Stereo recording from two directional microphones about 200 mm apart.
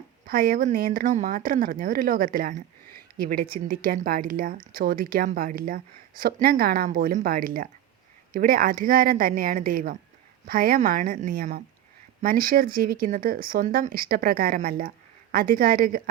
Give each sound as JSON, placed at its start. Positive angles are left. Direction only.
{"t": 0.3, "sound": "speech", "side_deg": -45}